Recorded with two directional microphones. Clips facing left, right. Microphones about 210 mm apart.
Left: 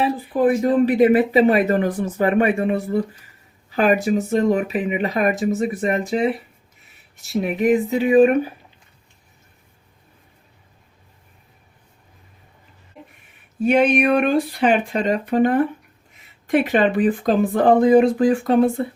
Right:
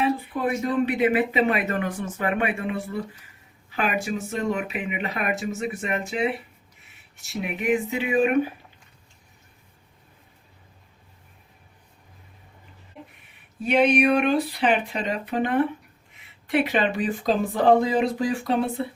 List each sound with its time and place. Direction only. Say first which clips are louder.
0.0 s speech: left 6 dB; 35° left (ahead or behind)
7.3 s speech: left 7 dB; 40° left (ahead or behind)
13.6 s speech: left 3 dB; 50° left (ahead or behind)